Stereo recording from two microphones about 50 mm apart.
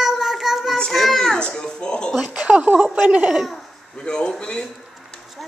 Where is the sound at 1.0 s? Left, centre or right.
Centre.